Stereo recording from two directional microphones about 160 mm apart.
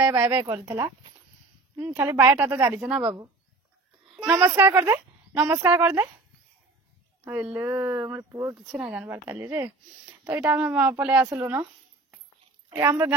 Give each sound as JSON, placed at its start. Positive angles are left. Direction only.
{"t": 0.0, "sound": "speech", "side_deg": -15}
{"t": 1.8, "sound": "speech", "side_deg": -15}
{"t": 3.0, "sound": "speech", "side_deg": -25}
{"t": 4.4, "sound": "speech", "side_deg": -10}
{"t": 7.2, "sound": "speech", "side_deg": -10}
{"t": 8.6, "sound": "speech", "side_deg": -5}
{"t": 12.6, "sound": "a woman's voice", "side_deg": -15}